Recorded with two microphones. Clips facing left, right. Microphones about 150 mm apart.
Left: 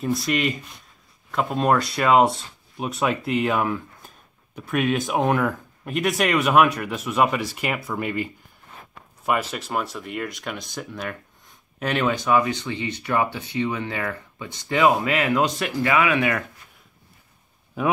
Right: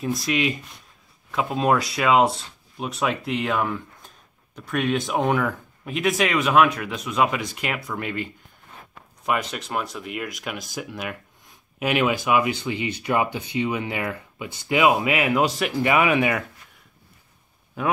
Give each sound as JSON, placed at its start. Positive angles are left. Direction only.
{"t": 0.0, "sound": "speech", "side_deg": 0}
{"t": 15.9, "sound": "speech", "side_deg": -20}